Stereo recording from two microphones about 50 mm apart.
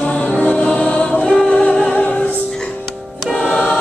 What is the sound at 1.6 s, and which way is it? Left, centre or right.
Music, left.